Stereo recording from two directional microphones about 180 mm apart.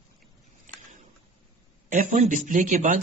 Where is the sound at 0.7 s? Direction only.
45° right (ahead or behind).